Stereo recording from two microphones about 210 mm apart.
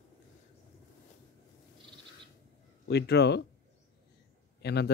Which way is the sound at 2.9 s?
50° left (ahead or behind).